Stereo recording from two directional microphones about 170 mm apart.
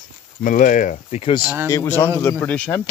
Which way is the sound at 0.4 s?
50° left (ahead or behind).